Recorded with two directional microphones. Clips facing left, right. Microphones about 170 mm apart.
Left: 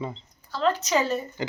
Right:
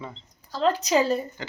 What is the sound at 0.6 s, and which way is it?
Speech, 35° right (ahead or behind).